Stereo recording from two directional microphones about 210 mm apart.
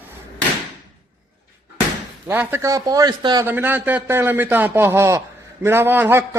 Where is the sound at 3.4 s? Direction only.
10° right (ahead or behind).